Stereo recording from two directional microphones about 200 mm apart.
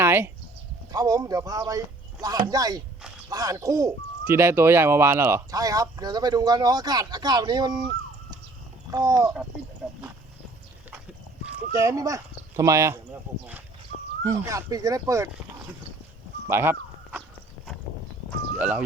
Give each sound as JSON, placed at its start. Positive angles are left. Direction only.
{"t": 0.0, "sound": "chicken", "side_deg": -10}
{"t": 0.9, "sound": "speech", "side_deg": -20}
{"t": 8.9, "sound": "speech", "side_deg": -15}
{"t": 11.7, "sound": "speech", "side_deg": -15}
{"t": 14.3, "sound": "speech", "side_deg": -15}
{"t": 16.5, "sound": "dog", "side_deg": -10}